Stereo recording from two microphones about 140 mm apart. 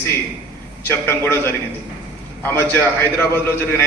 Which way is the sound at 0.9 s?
15° left (ahead or behind).